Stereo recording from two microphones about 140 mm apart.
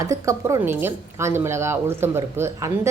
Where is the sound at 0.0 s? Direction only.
20° right (ahead or behind).